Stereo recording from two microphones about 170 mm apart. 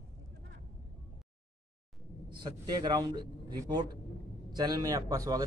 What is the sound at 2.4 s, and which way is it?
A man's voice, 25° right (ahead or behind).